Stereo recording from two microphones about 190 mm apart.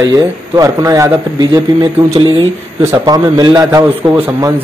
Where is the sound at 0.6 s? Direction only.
15° right (ahead or behind).